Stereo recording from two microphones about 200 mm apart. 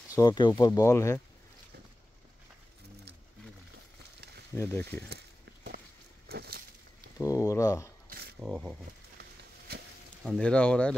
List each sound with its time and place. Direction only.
0.1 s speech: 20° left (ahead or behind)
4.6 s speech: 10° left (ahead or behind)
5.1 s a sound: 55° right (ahead or behind)
7.2 s speech: 15° left (ahead or behind)
8.4 s speech: centre (ahead or behind)
10.2 s speech: 5° left (ahead or behind)